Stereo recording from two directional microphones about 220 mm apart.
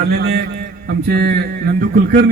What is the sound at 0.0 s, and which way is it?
A man's voice, 50° right (ahead or behind).